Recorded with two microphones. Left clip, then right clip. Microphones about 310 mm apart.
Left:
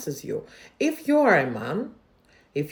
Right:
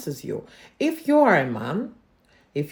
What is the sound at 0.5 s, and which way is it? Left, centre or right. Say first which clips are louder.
Speech: right 2 dB; centre.